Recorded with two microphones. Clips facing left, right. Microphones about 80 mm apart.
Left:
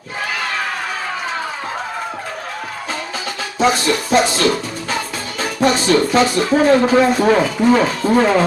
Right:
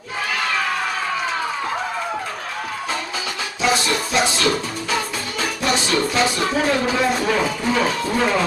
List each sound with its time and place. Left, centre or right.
3.6 s speech: left